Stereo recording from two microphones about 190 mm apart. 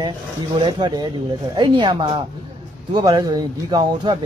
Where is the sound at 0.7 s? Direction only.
20° right (ahead or behind).